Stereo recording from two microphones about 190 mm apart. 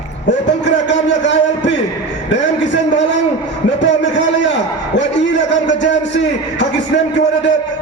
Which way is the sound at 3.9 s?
70° left (ahead or behind).